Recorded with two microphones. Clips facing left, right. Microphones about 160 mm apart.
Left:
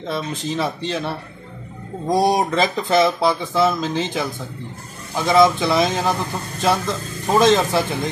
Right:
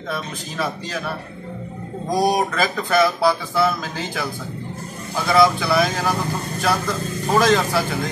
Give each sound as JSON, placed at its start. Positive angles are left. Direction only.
{"t": 0.1, "sound": "speech", "side_deg": 25}